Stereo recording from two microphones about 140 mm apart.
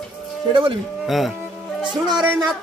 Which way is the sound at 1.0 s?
Centre (ahead or behind).